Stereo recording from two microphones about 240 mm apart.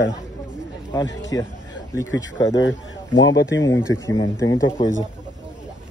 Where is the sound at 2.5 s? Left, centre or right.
Left.